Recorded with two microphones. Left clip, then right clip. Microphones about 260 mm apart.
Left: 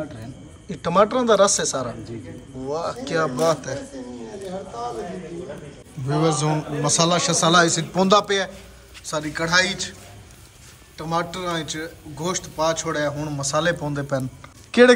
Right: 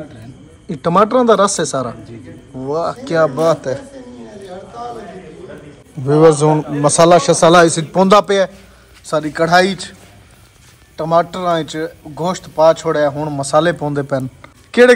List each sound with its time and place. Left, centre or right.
0.7 s a man's voice: centre
6.0 s a man's voice: centre
11.0 s a man's voice: centre